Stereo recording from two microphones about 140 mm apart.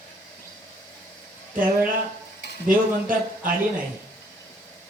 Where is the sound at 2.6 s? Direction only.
80° right.